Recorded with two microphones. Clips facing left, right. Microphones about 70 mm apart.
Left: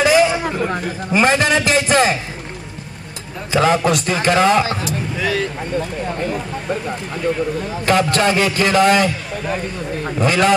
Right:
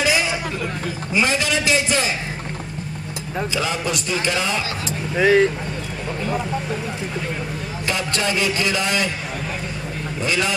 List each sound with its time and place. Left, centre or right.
0.0 s a sound: left
0.4 s hubbub: left
0.7 s a man's voice: left
3.5 s a man's voice: left
4.8 s speech: right
7.8 s a man's voice: left
10.2 s a man's voice: left